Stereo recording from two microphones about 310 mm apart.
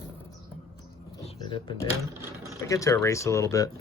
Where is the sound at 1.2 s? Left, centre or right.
Centre.